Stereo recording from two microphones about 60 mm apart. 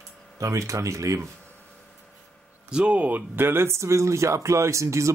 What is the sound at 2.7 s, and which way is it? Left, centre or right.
Speech, centre.